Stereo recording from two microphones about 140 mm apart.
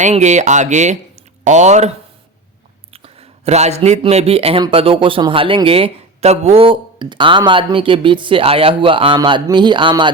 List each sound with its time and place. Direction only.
0.0 s speech: 55° right (ahead or behind)
2.9 s a sound: 45° right (ahead or behind)
4.0 s a man's voice: 45° right (ahead or behind)